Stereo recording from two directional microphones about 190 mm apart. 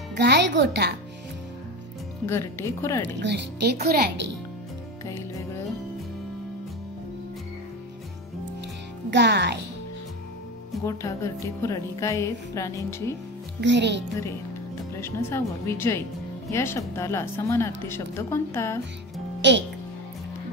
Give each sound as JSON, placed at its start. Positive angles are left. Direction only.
{"t": 0.1, "sound": "speech", "side_deg": -65}
{"t": 2.2, "sound": "speech", "side_deg": 15}
{"t": 3.2, "sound": "speech", "side_deg": -65}
{"t": 9.1, "sound": "speech", "side_deg": -60}
{"t": 10.8, "sound": "speech", "side_deg": 15}
{"t": 13.6, "sound": "speech", "side_deg": -65}
{"t": 15.0, "sound": "speech", "side_deg": 15}
{"t": 19.4, "sound": "speech", "side_deg": -70}